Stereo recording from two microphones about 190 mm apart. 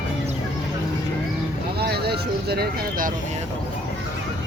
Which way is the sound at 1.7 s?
55° right (ahead or behind).